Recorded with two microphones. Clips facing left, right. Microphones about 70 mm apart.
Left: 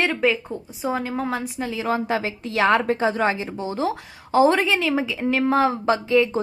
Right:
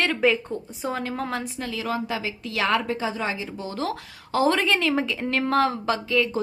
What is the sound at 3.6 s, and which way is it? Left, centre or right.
Speech, left.